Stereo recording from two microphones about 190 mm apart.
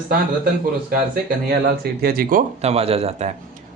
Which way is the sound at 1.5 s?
55° right (ahead or behind).